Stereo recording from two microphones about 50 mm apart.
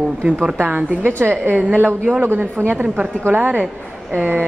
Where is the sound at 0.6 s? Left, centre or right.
Right.